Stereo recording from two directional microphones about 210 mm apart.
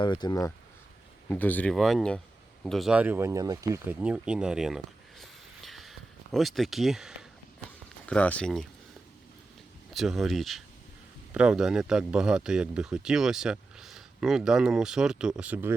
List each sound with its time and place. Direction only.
0.0 s speech: 20° left (ahead or behind); by 4.8 s centre (ahead or behind)
5.2 s a sound: centre (ahead or behind)
8.0 s speech: 5° left (ahead or behind)
9.9 s speech: centre (ahead or behind)